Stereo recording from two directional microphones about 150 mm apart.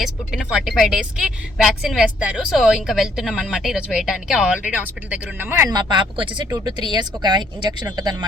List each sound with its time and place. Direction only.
0.0 s a woman's voice: 5° right (ahead or behind); by 8.1 s 30° right (ahead or behind)